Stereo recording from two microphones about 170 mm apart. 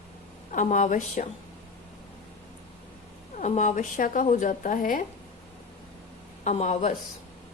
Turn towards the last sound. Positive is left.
turn(degrees=40)  # may be behind; listen again after turning